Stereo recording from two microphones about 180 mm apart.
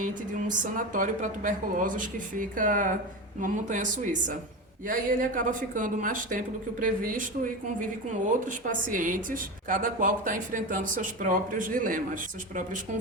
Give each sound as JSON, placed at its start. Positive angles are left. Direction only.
{"t": 0.0, "sound": "a woman's voice", "side_deg": -45}
{"t": 8.6, "sound": "a woman's voice", "side_deg": -45}